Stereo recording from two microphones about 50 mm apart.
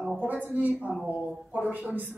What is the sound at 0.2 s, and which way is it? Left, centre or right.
A woman's voice, right.